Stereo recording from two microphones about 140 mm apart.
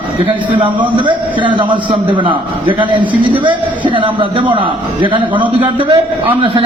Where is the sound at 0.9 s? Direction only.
35° right (ahead or behind).